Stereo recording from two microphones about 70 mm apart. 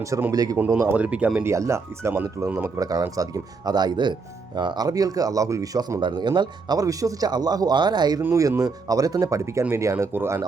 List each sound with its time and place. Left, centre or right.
0.3 s speech: right
0.9 s speech: centre
1.5 s speech: right
2.6 s speech: right
6.1 s speech: right
8.4 s speech: right